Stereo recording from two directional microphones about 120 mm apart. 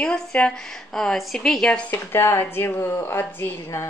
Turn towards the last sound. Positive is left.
turn(degrees=20)  # may be behind; listen again after turning